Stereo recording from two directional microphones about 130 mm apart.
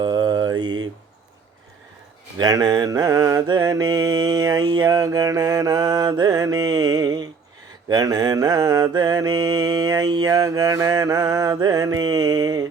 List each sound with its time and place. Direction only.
0.0 s mantra: 30° right (ahead or behind)
2.4 s mantra: 30° right (ahead or behind)